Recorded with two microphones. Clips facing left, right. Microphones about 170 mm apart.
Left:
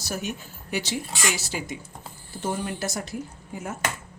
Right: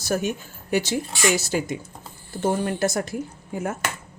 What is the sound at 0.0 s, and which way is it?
Speech, 50° right (ahead or behind).